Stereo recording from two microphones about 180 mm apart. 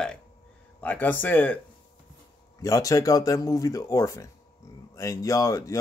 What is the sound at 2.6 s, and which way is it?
Speech, 20° left (ahead or behind).